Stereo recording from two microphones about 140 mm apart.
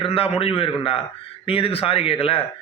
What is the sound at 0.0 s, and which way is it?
A man's voice, 45° left (ahead or behind).